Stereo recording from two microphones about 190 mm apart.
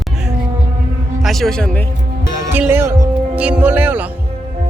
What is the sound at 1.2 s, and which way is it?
Speech, centre (ahead or behind).